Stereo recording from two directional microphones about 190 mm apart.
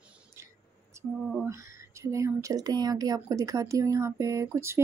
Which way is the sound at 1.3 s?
10° right (ahead or behind).